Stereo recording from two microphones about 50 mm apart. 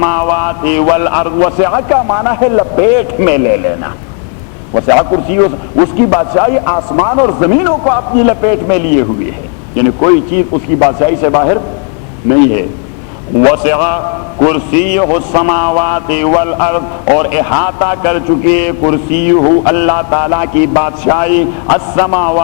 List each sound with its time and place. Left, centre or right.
0.0 s a man's voice: right
5.0 s a man's voice: right